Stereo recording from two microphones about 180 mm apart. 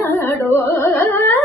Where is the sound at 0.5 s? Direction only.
10° left (ahead or behind).